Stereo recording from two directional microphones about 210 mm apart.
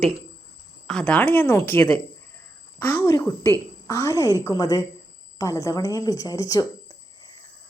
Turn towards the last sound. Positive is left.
turn(degrees=20)  # may be behind; listen again after turning